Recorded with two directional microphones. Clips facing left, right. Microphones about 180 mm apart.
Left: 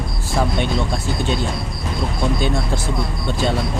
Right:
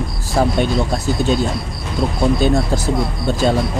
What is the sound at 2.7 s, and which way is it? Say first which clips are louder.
Speech: right 4 dB; 40° right (ahead or behind).